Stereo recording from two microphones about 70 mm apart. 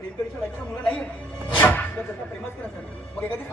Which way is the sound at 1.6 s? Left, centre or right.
Left.